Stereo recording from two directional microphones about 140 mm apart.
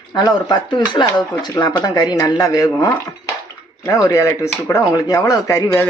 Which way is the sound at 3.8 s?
25° left (ahead or behind).